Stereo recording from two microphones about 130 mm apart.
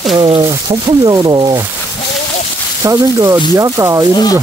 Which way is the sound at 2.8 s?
25° right (ahead or behind).